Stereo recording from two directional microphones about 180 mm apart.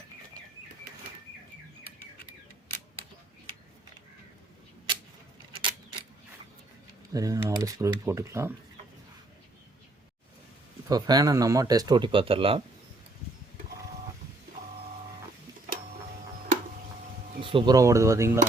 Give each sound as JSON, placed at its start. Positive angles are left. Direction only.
{"t": 7.1, "sound": "speech", "side_deg": -20}
{"t": 10.8, "sound": "speech", "side_deg": -20}
{"t": 17.4, "sound": "a sound", "side_deg": -30}
{"t": 17.7, "sound": "speech", "side_deg": -15}